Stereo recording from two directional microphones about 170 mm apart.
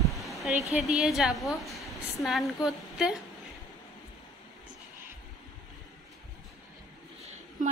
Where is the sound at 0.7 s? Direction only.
Centre (ahead or behind).